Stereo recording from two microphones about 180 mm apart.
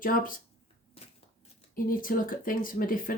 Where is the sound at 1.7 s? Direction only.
50° left (ahead or behind).